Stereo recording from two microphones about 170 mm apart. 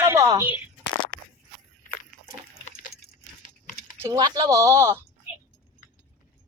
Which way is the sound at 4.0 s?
20° right (ahead or behind).